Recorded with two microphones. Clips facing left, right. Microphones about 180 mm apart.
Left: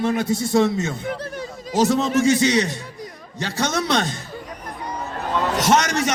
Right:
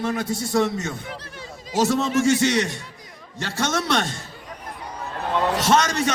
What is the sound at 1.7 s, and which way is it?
A man's voice, 20° left (ahead or behind).